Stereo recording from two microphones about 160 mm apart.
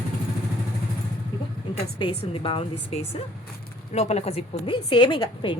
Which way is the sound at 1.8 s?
30° left (ahead or behind).